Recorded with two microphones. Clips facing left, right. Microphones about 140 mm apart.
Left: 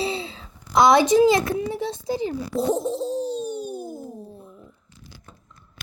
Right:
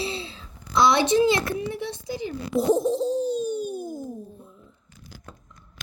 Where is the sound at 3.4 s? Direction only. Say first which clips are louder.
Right 2 dB; 20° left (ahead or behind).